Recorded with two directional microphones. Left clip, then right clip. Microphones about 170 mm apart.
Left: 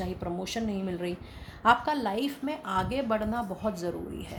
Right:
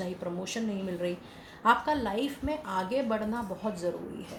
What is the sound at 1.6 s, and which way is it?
A woman's voice, 50° left (ahead or behind).